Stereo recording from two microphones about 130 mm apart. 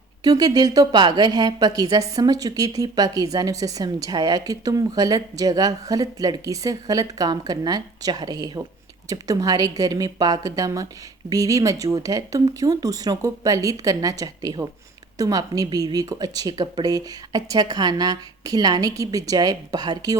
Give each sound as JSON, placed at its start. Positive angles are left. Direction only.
{"t": 0.3, "sound": "speech", "side_deg": -30}